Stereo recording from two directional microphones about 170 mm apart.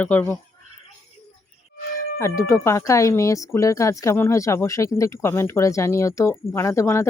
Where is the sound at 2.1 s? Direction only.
15° left (ahead or behind).